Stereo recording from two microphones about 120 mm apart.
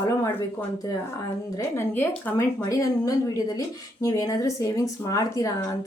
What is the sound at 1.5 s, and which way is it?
A woman's voice, 20° left (ahead or behind).